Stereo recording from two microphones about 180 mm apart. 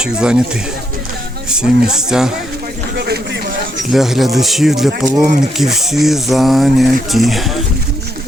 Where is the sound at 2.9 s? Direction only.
65° right (ahead or behind).